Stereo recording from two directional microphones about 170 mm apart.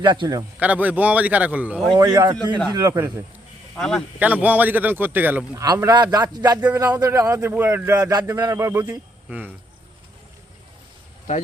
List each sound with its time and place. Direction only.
0.0 s a man's voice: 25° right (ahead or behind)
0.6 s speech: 10° right (ahead or behind)
1.9 s a man's voice: 25° right (ahead or behind)
3.8 s speech: 5° left (ahead or behind)
4.2 s speech: 10° right (ahead or behind)
5.6 s a man's voice: 20° right (ahead or behind)
7.9 s a man's voice: 20° right (ahead or behind)